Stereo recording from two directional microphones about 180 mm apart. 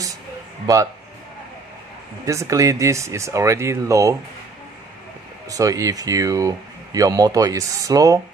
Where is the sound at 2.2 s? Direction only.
15° right (ahead or behind).